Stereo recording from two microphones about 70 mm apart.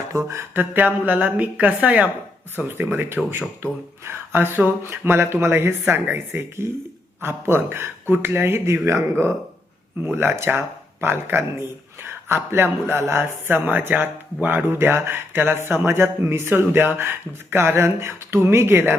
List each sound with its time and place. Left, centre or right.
0.1 s a sound: right
0.5 s a woman's voice: right
10.0 s speech: right